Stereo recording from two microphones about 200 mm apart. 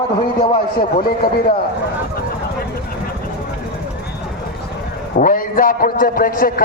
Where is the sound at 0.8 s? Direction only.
45° left (ahead or behind).